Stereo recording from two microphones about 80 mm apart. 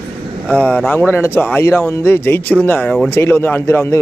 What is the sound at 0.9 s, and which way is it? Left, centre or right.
A man's voice, left.